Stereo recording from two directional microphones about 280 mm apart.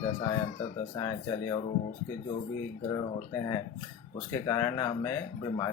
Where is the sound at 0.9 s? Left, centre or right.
Centre.